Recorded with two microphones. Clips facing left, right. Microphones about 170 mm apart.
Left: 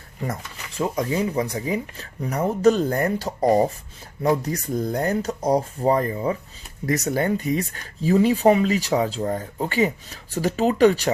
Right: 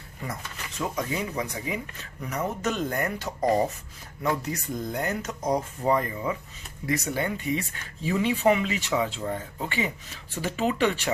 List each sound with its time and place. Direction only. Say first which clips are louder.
0.8 s speech: left 6 dB; 35° left (ahead or behind)